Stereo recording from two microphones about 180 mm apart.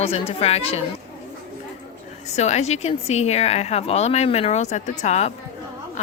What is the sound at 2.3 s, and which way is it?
Speech, 40° left (ahead or behind).